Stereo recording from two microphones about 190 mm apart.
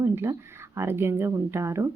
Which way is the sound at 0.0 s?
15° right (ahead or behind).